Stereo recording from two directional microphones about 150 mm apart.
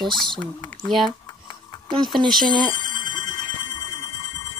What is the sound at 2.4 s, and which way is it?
Speech, 30° right (ahead or behind).